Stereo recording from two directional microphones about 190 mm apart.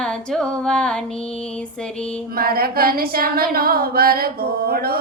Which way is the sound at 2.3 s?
50° right (ahead or behind).